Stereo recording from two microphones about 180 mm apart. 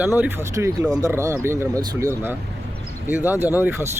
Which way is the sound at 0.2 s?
10° right (ahead or behind).